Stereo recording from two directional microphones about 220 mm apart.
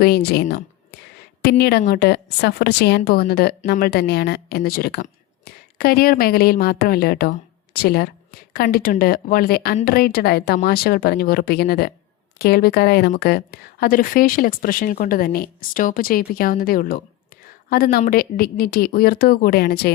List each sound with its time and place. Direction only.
0.0 s a woman's voice: 45° left (ahead or behind)